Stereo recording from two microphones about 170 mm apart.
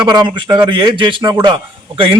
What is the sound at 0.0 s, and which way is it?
Speech, 25° right (ahead or behind).